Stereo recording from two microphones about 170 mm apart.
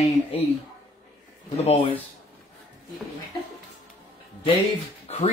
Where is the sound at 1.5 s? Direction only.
40° left (ahead or behind).